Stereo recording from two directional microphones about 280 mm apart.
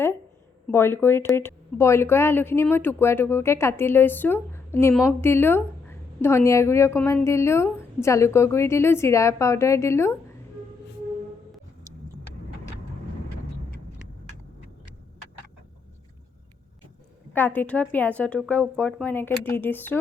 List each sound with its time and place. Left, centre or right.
0.7 s a woman's voice: centre
17.3 s a woman's voice: centre